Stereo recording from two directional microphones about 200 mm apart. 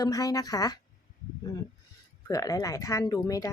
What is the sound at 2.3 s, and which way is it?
Speech, 15° left (ahead or behind).